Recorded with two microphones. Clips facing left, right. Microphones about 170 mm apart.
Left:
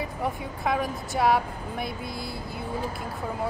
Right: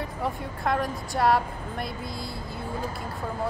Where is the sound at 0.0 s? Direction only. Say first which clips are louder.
Left 1 dB; centre (ahead or behind).